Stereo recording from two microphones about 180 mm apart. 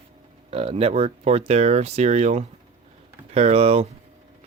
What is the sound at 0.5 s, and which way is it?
Speech, 35° right (ahead or behind).